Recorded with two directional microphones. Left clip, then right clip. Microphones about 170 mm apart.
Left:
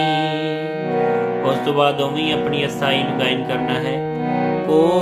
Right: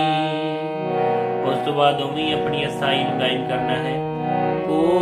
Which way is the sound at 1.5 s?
35° left (ahead or behind).